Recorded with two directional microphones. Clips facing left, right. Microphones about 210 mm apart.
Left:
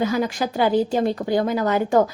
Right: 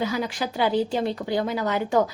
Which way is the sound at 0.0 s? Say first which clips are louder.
Left 5 dB; 50° left (ahead or behind).